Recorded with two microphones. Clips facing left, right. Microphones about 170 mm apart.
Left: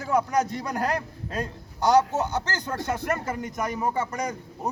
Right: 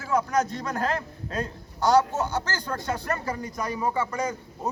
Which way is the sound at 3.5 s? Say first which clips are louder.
Left 1 dB; 20° left (ahead or behind).